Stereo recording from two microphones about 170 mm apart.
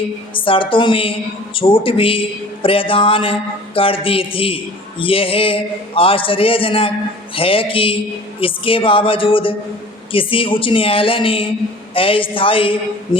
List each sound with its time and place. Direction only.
0.3 s a man's voice: 30° left (ahead or behind)